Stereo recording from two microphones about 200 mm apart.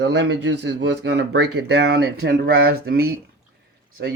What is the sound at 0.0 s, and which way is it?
Speech, 60° right (ahead or behind).